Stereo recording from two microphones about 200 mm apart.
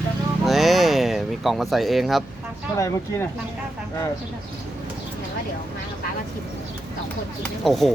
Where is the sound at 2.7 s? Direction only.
15° left (ahead or behind).